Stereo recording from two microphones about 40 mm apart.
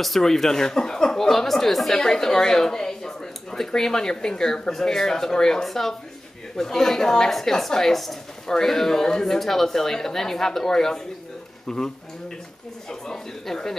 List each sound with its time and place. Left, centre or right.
0.0 s a woman's voice: centre
13.0 s speech: centre